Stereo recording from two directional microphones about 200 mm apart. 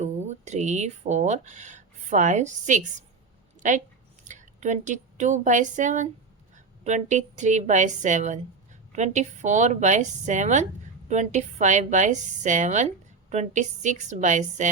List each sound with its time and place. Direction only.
0.0 s a woman's voice: 35° right (ahead or behind)